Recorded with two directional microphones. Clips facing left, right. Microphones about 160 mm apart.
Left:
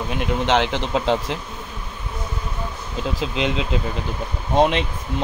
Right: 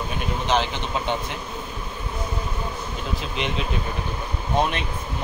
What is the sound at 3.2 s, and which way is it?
Speech, 90° left.